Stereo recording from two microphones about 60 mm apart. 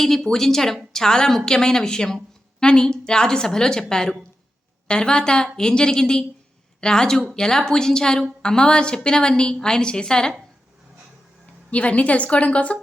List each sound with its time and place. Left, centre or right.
0.0 s a woman's voice: centre
11.7 s a woman's voice: left